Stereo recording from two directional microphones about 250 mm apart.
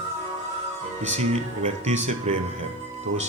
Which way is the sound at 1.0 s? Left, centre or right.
Right.